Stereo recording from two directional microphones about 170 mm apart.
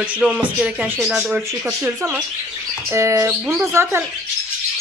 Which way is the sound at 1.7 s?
15° right (ahead or behind).